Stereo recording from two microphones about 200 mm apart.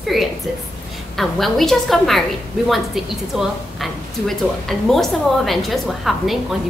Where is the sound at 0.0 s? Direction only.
Centre (ahead or behind).